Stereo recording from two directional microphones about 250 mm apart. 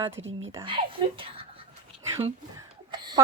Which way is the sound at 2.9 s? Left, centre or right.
Centre.